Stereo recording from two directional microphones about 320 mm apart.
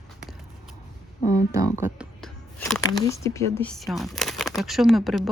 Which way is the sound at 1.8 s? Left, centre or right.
Centre.